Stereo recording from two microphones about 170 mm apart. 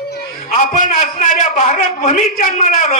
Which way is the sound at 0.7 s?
50° left (ahead or behind).